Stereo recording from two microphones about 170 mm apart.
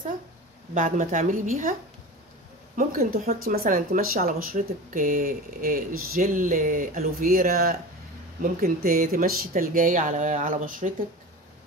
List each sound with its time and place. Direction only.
0.7 s speech: 50° right (ahead or behind)